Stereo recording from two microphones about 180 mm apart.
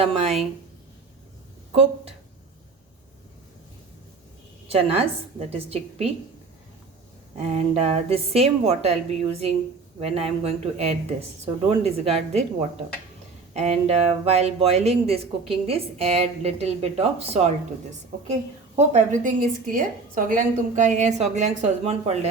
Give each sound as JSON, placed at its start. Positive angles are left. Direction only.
{"t": 0.0, "sound": "a woman's voice", "side_deg": -35}
{"t": 1.7, "sound": "speech", "side_deg": -35}
{"t": 4.7, "sound": "speech", "side_deg": -35}
{"t": 7.3, "sound": "speech", "side_deg": -35}
{"t": 13.5, "sound": "speech", "side_deg": -40}
{"t": 18.9, "sound": "speech", "side_deg": -45}